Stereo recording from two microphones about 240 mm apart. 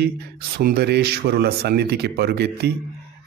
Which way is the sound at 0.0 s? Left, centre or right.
Right.